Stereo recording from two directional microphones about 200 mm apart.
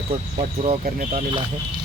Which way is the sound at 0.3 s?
35° right (ahead or behind).